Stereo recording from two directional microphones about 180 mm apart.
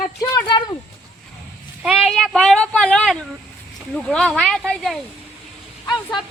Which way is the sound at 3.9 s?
5° left (ahead or behind).